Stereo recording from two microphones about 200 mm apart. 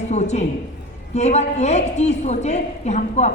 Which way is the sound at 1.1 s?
35° left (ahead or behind).